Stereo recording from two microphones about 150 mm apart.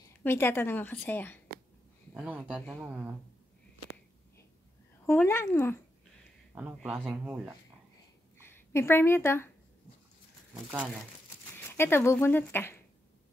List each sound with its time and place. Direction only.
0.2 s a woman's voice: 15° left (ahead or behind)
2.1 s speech: 10° right (ahead or behind)
5.0 s a woman's voice: 15° left (ahead or behind)
6.5 s speech: 10° right (ahead or behind)
8.5 s a woman's voice: 15° left (ahead or behind)
11.5 s speech: 15° left (ahead or behind)